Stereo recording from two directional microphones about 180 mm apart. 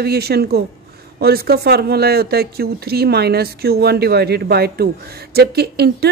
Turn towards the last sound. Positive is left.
turn(degrees=-60)  # may be behind; listen again after turning